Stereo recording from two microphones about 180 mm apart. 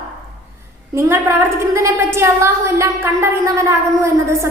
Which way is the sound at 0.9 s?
15° right (ahead or behind).